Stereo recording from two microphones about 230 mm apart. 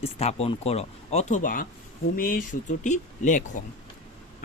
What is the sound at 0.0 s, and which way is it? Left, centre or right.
Speech, left.